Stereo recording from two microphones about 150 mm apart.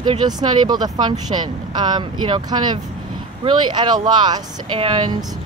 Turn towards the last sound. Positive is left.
turn(degrees=-30)  # may be behind; listen again after turning